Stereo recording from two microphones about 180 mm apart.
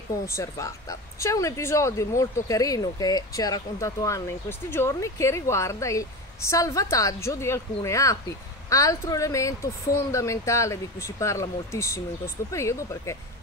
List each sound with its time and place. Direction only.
0.4 s speech: 15° left (ahead or behind)